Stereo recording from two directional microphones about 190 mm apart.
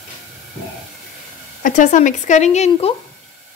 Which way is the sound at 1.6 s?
40° left (ahead or behind).